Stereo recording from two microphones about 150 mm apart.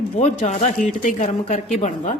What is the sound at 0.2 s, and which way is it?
A woman's voice, 50° left (ahead or behind).